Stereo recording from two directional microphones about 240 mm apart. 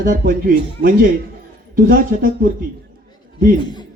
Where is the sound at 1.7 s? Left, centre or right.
Right.